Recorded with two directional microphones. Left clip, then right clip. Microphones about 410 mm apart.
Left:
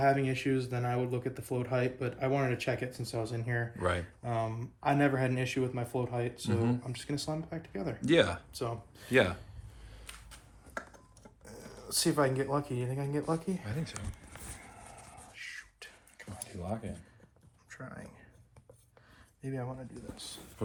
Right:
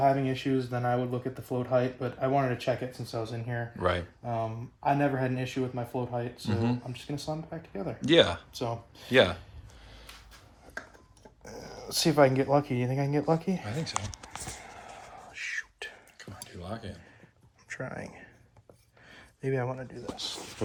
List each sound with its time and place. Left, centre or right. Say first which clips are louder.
0.0 s speech: right 3 dB; centre
7.1 s speech: right 1 dB; centre
8.0 s speech: right 5 dB; centre
8.5 s speech: right 4 dB; right
9.1 s speech: right 5 dB; centre
11.4 s speech: right 6 dB; right
13.7 s speech: right 8 dB; centre
15.3 s whispering: right 10 dB; centre
16.5 s speech: left 1 dB; centre
17.7 s speech: right 9 dB; centre
19.1 s a sound: right 10 dB; centre